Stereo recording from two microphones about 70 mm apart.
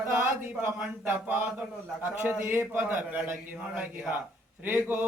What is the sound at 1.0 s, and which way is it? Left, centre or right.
A man's voice, right.